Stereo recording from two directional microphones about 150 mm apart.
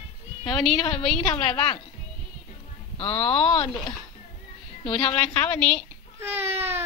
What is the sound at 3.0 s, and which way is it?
Speech, 40° left (ahead or behind).